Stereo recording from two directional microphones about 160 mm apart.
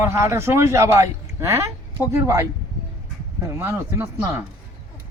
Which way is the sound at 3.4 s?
15° right (ahead or behind).